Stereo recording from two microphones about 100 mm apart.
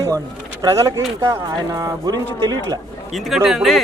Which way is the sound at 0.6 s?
30° right (ahead or behind).